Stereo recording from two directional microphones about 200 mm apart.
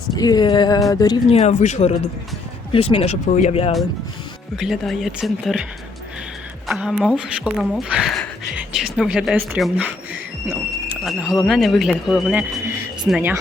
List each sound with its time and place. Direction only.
0.2 s speech: 20° left (ahead or behind)
1.4 s speech: 35° left (ahead or behind)
4.5 s speech: centre (ahead or behind)
6.7 s speech: 5° right (ahead or behind)
11.0 s speech: centre (ahead or behind)